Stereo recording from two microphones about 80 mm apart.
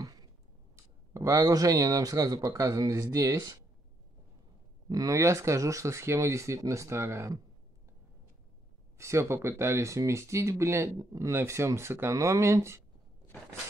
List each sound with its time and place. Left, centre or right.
1.1 s a man's voice: right
4.8 s speech: right
8.9 s speech: right